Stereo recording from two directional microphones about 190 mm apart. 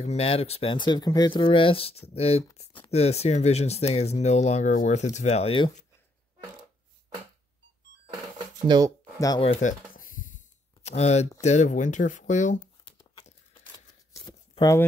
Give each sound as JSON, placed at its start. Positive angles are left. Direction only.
{"t": 0.0, "sound": "speech", "side_deg": 35}
{"t": 8.6, "sound": "speech", "side_deg": -20}
{"t": 9.4, "sound": "a sound", "side_deg": 35}
{"t": 11.4, "sound": "speech", "side_deg": 40}
{"t": 12.5, "sound": "a sound", "side_deg": 25}
{"t": 14.5, "sound": "speech", "side_deg": 20}